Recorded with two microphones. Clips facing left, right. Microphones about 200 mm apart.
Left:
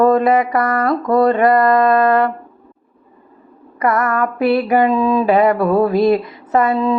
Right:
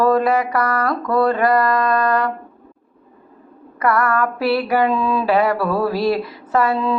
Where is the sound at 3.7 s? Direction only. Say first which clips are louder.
Left 1 dB; 20° left (ahead or behind).